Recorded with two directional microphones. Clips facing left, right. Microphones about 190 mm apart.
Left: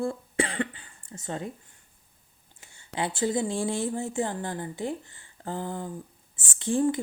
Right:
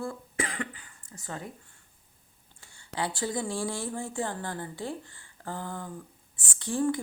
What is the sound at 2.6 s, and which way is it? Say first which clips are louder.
Speech: left 2 dB; 20° left (ahead or behind).